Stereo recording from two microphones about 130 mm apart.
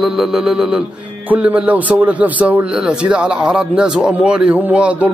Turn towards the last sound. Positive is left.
turn(degrees=-10)  # may be behind; listen again after turning